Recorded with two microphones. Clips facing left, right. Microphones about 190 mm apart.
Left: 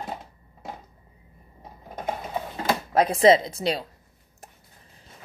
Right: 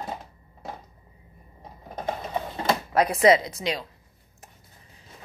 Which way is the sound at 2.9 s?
25° left (ahead or behind).